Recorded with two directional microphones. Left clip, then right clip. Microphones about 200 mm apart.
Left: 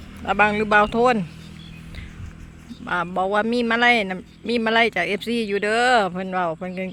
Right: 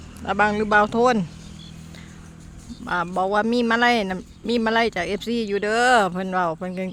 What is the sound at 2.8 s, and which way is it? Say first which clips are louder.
Speech: even; centre (ahead or behind).